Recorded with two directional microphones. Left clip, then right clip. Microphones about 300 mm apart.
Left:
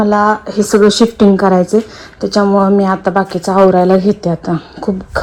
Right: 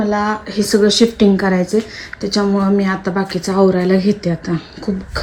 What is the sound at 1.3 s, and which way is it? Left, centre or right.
A woman's voice, centre.